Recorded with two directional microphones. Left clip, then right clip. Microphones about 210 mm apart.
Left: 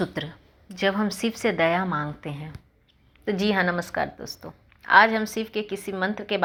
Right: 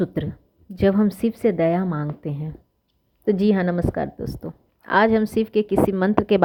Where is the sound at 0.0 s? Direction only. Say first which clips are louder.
Right 3 dB; 40° right (ahead or behind).